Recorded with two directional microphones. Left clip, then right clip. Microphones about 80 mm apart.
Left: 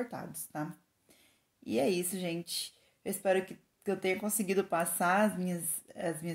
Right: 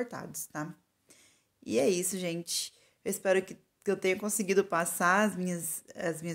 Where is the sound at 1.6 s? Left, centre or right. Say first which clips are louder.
Right 3 dB; right.